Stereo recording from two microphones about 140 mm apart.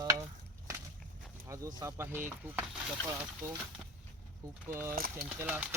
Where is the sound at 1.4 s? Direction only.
20° right (ahead or behind).